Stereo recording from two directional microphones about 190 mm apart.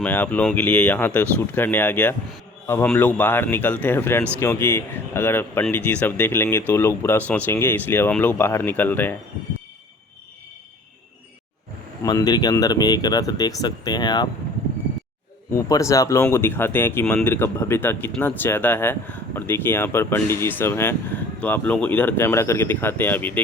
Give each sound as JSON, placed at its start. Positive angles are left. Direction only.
{"t": 0.0, "sound": "speech", "side_deg": 10}
{"t": 12.0, "sound": "speech", "side_deg": 20}
{"t": 15.5, "sound": "speech", "side_deg": 15}